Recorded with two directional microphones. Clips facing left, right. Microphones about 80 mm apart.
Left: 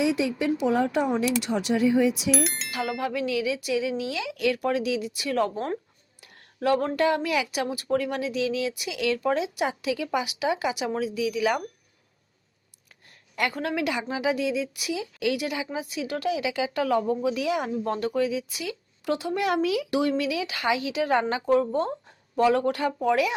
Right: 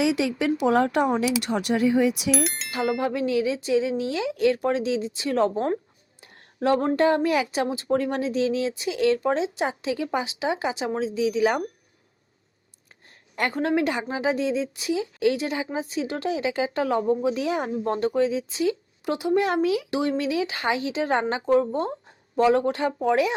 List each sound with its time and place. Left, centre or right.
0.0 s a woman's voice: right
2.3 s music: centre
3.0 s speech: right
13.3 s a woman's voice: right